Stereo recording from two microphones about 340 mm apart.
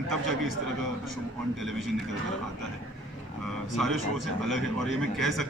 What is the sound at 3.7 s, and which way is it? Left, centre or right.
A man's voice, centre.